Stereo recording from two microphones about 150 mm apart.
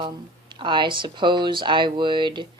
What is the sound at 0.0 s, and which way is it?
A woman's voice, 30° right (ahead or behind).